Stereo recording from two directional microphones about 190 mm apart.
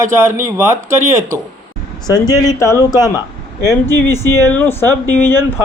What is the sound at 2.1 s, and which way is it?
Speech, 20° left (ahead or behind).